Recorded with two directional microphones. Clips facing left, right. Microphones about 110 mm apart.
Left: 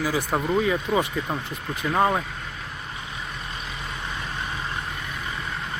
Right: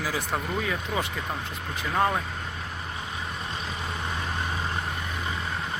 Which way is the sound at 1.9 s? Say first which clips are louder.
Left 3 dB; 20° left (ahead or behind).